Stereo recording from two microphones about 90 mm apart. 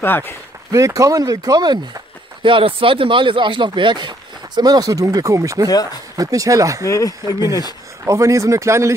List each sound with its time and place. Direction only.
0.0 s speech: 25° left (ahead or behind)
0.7 s speech: 35° right (ahead or behind)
6.9 s speech: 40° left (ahead or behind)
8.0 s speech: 35° right (ahead or behind)